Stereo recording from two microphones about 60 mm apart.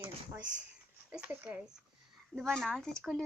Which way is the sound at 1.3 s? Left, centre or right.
Right.